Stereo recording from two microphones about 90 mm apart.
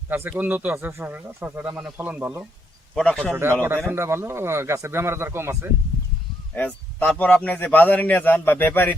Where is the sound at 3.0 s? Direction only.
10° left (ahead or behind).